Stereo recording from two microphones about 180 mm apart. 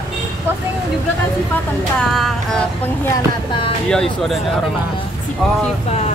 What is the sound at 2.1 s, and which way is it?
Music, centre (ahead or behind).